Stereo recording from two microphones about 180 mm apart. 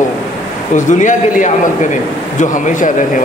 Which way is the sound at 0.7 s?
45° left (ahead or behind).